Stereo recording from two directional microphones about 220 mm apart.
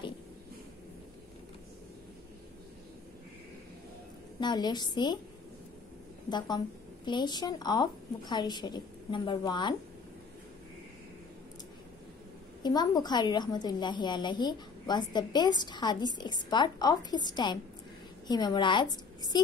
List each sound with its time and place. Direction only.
4.4 s a woman's voice: 20° left (ahead or behind)
6.2 s a woman's voice: 20° left (ahead or behind)
12.6 s a woman's voice: 20° left (ahead or behind)